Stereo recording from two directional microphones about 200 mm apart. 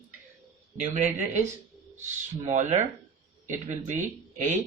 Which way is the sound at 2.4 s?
35° right (ahead or behind).